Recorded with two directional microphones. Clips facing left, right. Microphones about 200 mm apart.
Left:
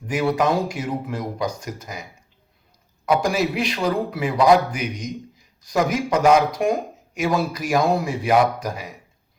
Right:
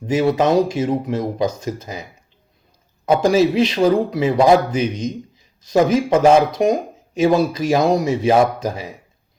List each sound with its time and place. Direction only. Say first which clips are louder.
0.0 s speech: right 4 dB; 25° right (ahead or behind)
3.1 s speech: right 6 dB; 25° right (ahead or behind)